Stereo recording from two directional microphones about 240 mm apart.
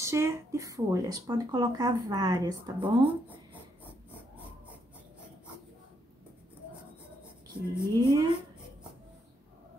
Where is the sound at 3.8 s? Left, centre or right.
Centre.